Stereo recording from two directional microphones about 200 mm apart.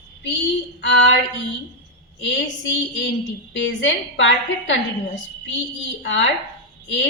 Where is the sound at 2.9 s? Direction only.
60° left (ahead or behind).